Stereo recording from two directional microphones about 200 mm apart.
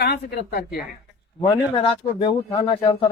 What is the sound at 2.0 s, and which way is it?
Speech, 20° left (ahead or behind).